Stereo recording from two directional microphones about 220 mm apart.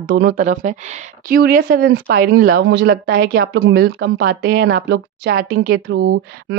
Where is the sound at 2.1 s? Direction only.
40° right (ahead or behind).